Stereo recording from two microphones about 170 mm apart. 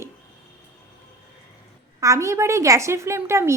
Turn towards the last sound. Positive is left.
turn(degrees=-15)  # may be behind; listen again after turning